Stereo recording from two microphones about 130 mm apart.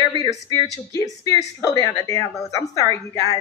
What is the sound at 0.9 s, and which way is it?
A woman's voice, 25° left (ahead or behind).